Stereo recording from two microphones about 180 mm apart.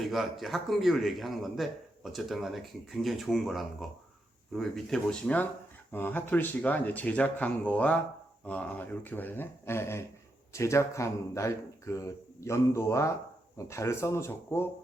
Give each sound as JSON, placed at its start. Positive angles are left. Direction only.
{"t": 0.0, "sound": "a man's voice", "side_deg": 0}